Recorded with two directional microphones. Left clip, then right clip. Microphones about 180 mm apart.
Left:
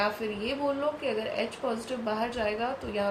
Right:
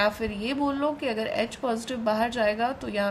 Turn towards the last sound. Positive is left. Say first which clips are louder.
# right 3 dB
turn(degrees=-65)  # may be behind; listen again after turning